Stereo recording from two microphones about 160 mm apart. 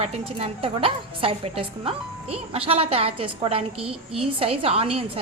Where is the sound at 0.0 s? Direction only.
40° right (ahead or behind).